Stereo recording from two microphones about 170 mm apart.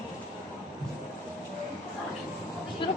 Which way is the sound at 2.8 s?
30° left (ahead or behind).